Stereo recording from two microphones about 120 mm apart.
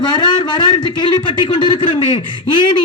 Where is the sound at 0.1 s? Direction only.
35° left (ahead or behind).